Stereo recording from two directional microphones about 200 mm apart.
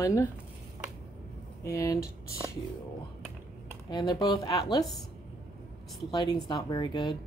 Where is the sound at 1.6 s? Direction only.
15° left (ahead or behind).